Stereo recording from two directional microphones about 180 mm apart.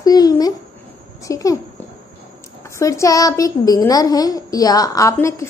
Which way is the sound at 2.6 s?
15° left (ahead or behind).